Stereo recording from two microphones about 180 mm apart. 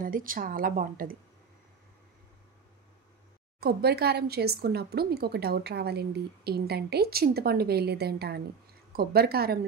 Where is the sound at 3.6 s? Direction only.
60° right (ahead or behind).